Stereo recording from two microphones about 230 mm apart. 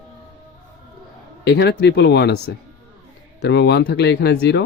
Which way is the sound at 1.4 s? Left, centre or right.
Left.